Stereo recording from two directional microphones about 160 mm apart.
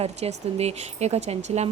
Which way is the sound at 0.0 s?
40° right (ahead or behind).